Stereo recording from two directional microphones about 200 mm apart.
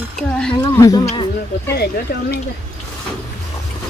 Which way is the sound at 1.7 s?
50° left (ahead or behind).